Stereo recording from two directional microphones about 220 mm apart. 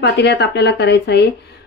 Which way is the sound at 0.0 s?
50° left (ahead or behind).